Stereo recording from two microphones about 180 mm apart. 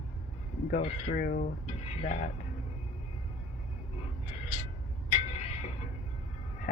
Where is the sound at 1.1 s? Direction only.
50° left (ahead or behind).